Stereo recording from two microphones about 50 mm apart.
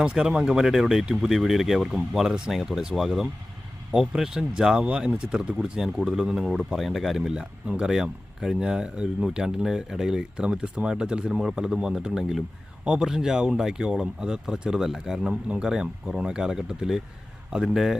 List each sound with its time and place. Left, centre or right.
0.0 s speech: centre